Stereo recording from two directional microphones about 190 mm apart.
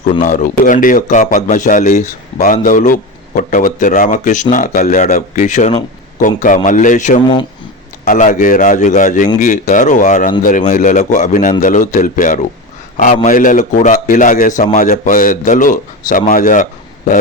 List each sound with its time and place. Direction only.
0.2 s speech: 45° left (ahead or behind)